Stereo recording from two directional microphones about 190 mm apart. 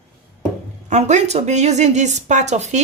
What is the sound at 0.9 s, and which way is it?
A woman's voice, 40° right (ahead or behind).